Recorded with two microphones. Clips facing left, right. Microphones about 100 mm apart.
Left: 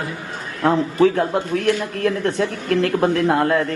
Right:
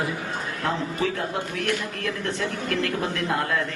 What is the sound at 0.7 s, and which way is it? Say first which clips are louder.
Speech: left 11 dB; 60° left (ahead or behind).